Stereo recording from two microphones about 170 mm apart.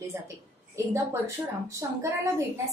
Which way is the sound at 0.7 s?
15° right (ahead or behind).